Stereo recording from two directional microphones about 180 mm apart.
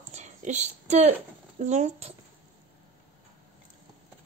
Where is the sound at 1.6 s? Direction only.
40° right (ahead or behind).